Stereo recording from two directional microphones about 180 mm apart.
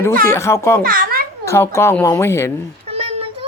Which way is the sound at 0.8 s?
55° right (ahead or behind).